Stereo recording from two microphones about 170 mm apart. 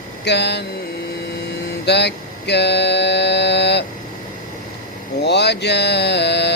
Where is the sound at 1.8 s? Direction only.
80° left.